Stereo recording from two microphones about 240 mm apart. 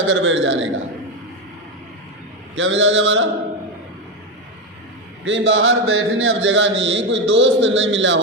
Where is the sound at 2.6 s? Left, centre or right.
Right.